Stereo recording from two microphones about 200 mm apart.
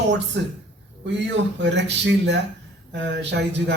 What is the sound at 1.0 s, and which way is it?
A man's voice, 60° right (ahead or behind).